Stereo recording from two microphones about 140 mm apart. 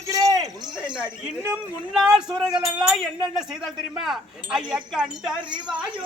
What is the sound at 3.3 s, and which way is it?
Speech, centre (ahead or behind).